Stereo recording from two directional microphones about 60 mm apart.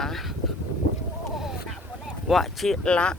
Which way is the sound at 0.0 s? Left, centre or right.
Centre.